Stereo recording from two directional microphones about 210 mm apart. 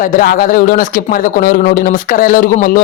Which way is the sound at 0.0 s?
40° left (ahead or behind).